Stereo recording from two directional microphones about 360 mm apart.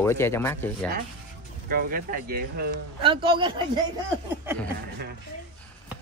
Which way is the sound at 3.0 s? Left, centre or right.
Centre.